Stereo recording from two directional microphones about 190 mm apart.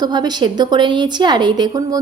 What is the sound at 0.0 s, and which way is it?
A woman's voice, 20° right (ahead or behind).